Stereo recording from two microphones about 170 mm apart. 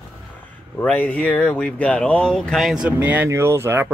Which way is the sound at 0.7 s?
10° left (ahead or behind).